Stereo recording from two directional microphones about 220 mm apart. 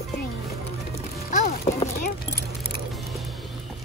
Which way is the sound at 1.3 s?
30° left (ahead or behind).